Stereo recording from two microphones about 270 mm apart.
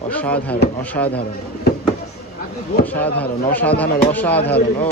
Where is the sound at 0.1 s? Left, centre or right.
Centre.